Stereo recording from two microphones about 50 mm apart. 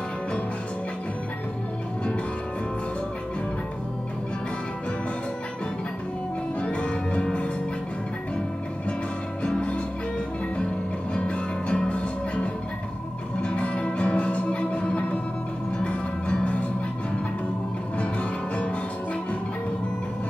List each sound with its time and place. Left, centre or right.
6.6 s music: left
9.4 s music: left
11.1 s music: left